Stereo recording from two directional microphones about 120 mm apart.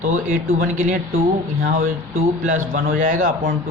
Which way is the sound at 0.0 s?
90° right.